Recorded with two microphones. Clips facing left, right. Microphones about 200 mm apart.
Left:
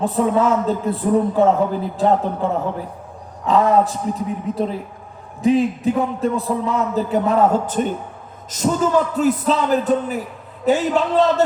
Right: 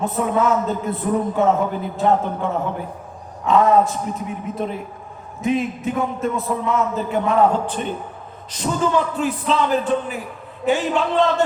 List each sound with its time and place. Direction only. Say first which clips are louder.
0.0 s speech: left 2 dB; 30° left (ahead or behind)